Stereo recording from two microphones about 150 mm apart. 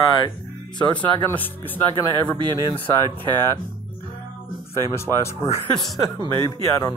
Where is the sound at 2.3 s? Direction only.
30° right (ahead or behind).